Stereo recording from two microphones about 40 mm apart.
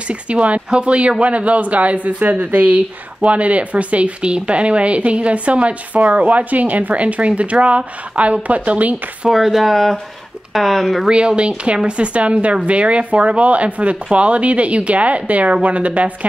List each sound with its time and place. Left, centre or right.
0.1 s speech: right
9.3 s speech: centre
11.1 s speech: right